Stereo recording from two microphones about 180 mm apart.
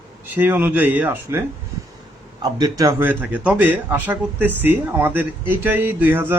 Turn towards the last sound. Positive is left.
turn(degrees=-10)  # may be behind; listen again after turning